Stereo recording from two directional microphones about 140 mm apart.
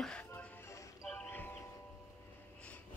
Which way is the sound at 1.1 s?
10° left (ahead or behind).